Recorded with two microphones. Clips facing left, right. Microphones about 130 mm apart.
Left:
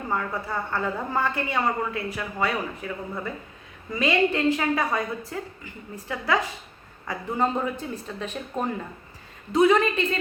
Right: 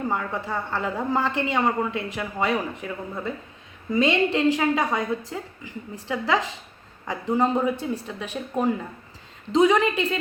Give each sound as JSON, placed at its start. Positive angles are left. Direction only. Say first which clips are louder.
{"t": 0.1, "sound": "a woman's voice", "louder": "right 1 dB", "side_deg": -15}